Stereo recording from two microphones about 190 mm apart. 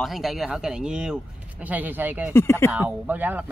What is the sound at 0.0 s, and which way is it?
Speech, centre (ahead or behind).